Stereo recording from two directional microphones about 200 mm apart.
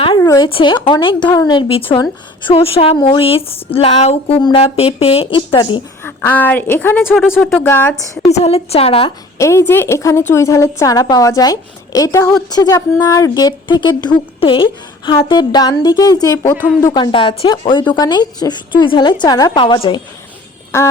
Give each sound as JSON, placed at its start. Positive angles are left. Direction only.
{"t": 0.2, "sound": "speech", "side_deg": 20}
{"t": 6.1, "sound": "a woman's voice", "side_deg": 10}
{"t": 8.3, "sound": "speech", "side_deg": 30}
{"t": 9.4, "sound": "a woman's voice", "side_deg": 15}
{"t": 16.6, "sound": "speech", "side_deg": -5}
{"t": 16.8, "sound": "speech", "side_deg": 20}
{"t": 20.7, "sound": "a woman's voice", "side_deg": 15}